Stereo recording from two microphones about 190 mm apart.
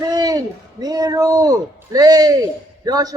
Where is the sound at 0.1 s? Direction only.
20° right (ahead or behind).